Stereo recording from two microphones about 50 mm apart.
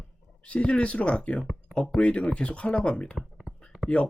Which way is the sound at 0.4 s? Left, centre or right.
Left.